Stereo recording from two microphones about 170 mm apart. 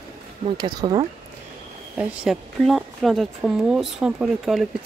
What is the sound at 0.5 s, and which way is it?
Speech, 25° right (ahead or behind).